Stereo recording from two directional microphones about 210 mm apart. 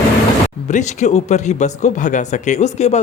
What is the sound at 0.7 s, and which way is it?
Speech, 35° left (ahead or behind).